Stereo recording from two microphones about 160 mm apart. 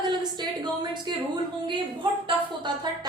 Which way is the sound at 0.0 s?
25° right (ahead or behind).